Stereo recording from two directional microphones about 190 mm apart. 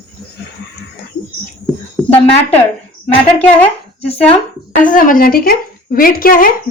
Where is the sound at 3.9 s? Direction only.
30° left (ahead or behind).